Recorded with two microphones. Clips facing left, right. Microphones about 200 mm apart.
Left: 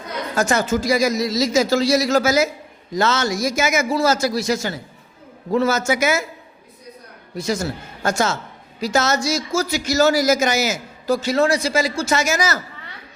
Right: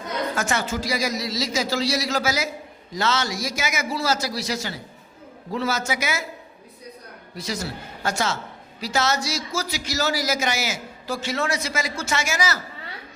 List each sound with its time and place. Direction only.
0.3 s a man's voice: 40° left (ahead or behind)
7.3 s a man's voice: 50° left (ahead or behind)